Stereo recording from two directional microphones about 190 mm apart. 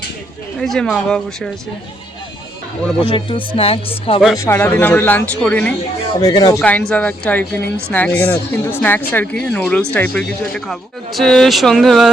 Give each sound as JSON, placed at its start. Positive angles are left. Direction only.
{"t": 0.6, "sound": "speech", "side_deg": 0}
{"t": 3.1, "sound": "speech", "side_deg": 25}
{"t": 4.4, "sound": "speech", "side_deg": 10}
{"t": 6.1, "sound": "speech", "side_deg": 20}
{"t": 6.6, "sound": "speech", "side_deg": 5}